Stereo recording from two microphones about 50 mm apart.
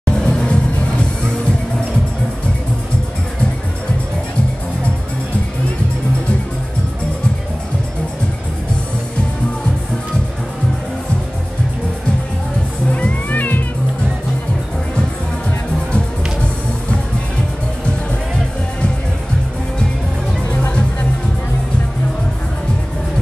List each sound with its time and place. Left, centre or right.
0.0 s music: centre
12.9 s music: left